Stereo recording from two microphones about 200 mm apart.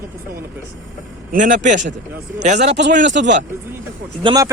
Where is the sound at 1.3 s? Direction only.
40° right (ahead or behind).